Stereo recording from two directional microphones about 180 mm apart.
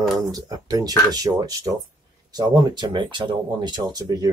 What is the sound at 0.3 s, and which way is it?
Speech, 20° right (ahead or behind).